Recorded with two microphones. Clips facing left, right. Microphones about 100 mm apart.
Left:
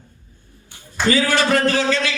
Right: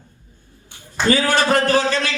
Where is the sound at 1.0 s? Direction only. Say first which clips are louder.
Right 1 dB; 45° right (ahead or behind).